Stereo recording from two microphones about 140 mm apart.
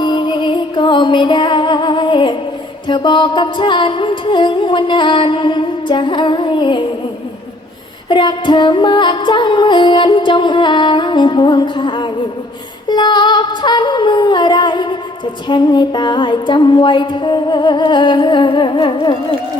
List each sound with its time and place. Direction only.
0.0 s music: 35° left (ahead or behind)
8.1 s music: 35° left (ahead or behind)